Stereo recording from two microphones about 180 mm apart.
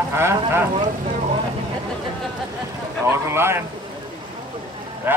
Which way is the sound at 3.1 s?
15° right (ahead or behind).